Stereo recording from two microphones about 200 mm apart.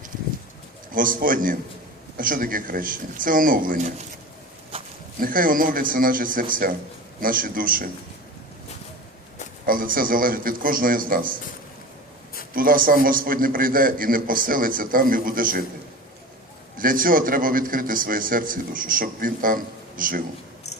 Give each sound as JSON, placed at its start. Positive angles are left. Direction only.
{"t": 0.9, "sound": "a man's voice", "side_deg": -45}
{"t": 5.2, "sound": "a man's voice", "side_deg": -45}
{"t": 9.6, "sound": "a man's voice", "side_deg": -45}
{"t": 12.5, "sound": "a man's voice", "side_deg": -45}
{"t": 16.7, "sound": "a man's voice", "side_deg": -45}